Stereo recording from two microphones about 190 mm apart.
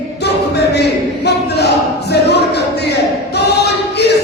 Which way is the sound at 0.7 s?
60° left (ahead or behind).